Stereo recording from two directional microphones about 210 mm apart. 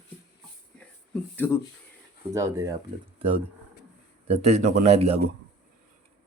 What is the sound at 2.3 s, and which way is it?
Speech, 15° right (ahead or behind).